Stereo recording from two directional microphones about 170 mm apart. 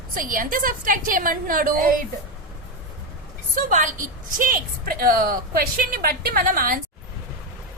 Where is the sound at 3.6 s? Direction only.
50° right (ahead or behind).